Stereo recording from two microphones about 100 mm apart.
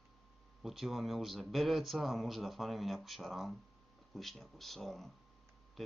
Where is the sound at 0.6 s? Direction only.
Centre (ahead or behind).